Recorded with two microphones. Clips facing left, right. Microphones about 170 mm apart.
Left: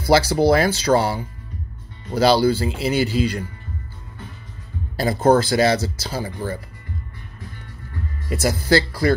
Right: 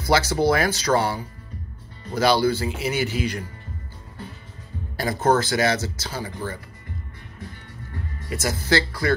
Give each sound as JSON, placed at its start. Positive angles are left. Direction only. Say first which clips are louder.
{"t": 0.0, "sound": "speech", "louder": "left 4 dB", "side_deg": 30}
{"t": 4.9, "sound": "speech", "louder": "left 4 dB", "side_deg": 30}
{"t": 8.3, "sound": "speech", "louder": "left 5 dB", "side_deg": 35}